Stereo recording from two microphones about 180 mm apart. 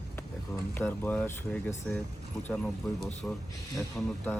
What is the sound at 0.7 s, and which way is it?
Speech, 10° left (ahead or behind).